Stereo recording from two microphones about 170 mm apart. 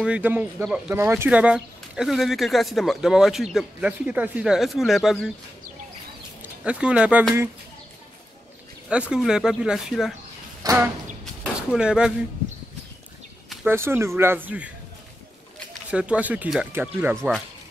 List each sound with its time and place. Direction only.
0.0 s speech: 10° right (ahead or behind)
6.4 s speech: 5° right (ahead or behind)
8.8 s speech: 5° right (ahead or behind)
10.6 s a sound: 20° right (ahead or behind)
11.7 s speech: 5° right (ahead or behind)
13.7 s speech: 15° right (ahead or behind)
15.9 s speech: 5° right (ahead or behind)